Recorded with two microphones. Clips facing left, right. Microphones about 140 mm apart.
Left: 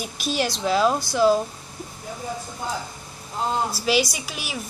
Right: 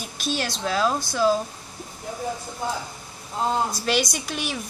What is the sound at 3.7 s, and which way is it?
Speech, 5° left (ahead or behind).